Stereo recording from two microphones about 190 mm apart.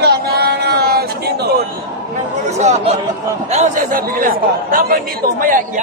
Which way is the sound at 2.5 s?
35° right (ahead or behind).